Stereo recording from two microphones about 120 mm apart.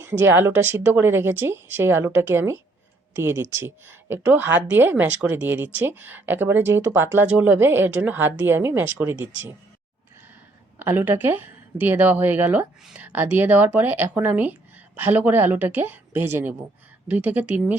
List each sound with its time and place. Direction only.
0.0 s a woman's voice: 20° right (ahead or behind)
10.8 s a woman's voice: 15° right (ahead or behind)